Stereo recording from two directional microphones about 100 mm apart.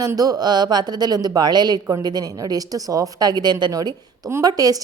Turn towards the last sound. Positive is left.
turn(degrees=-40)  # may be behind; listen again after turning